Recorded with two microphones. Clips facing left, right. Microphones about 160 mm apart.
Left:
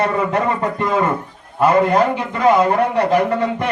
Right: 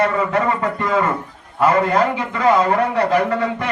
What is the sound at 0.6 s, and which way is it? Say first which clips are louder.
A man's voice: left 1 dB; 20° left (ahead or behind).